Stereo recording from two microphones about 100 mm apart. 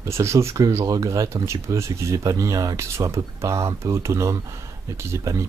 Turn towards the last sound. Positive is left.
turn(degrees=-30)  # may be behind; listen again after turning